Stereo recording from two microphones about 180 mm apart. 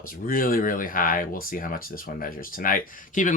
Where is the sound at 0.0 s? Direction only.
50° left (ahead or behind).